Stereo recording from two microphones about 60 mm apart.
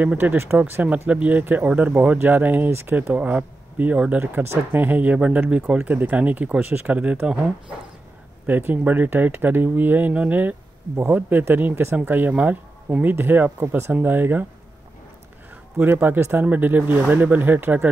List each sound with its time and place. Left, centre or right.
0.2 s speech: right
1.4 s speech: right; by 5.8 s centre
5.8 s speech: right
8.5 s speech: right
12.0 s speech: right
15.8 s speech: right
16.4 s speech: right